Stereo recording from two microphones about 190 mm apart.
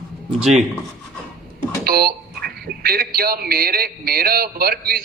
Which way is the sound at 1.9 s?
55° right (ahead or behind).